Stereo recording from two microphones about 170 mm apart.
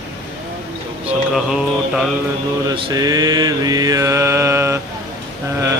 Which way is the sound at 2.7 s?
20° right (ahead or behind).